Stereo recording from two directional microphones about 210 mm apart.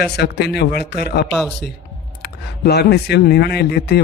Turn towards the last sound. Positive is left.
turn(degrees=50)  # may be behind; listen again after turning